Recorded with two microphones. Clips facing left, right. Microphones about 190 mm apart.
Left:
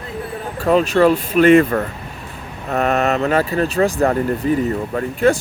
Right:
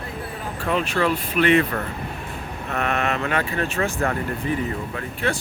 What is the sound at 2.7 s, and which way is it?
Speech, 35° left (ahead or behind).